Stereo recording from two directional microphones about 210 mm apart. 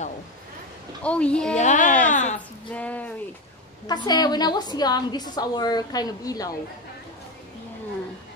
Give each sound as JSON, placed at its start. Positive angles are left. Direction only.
{"t": 1.0, "sound": "speech", "side_deg": 5}
{"t": 1.6, "sound": "a woman's voice", "side_deg": 35}
{"t": 2.7, "sound": "speech", "side_deg": 5}
{"t": 3.8, "sound": "a woman's voice", "side_deg": 20}